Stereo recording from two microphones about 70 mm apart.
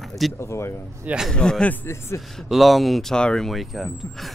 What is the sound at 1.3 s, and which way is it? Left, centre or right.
Speech, centre.